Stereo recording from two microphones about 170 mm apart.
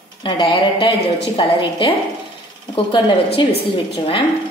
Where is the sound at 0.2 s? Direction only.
30° left (ahead or behind).